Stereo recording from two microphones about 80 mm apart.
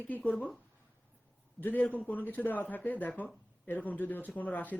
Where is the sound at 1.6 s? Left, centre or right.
Left.